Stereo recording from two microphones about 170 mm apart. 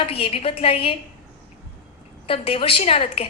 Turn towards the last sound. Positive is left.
turn(degrees=35)  # may be behind; listen again after turning